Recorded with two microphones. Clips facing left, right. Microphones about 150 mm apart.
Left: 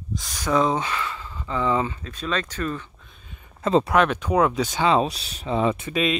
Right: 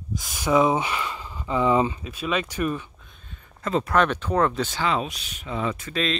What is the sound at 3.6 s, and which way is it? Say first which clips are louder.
Speech: left 5 dB; 25° left (ahead or behind).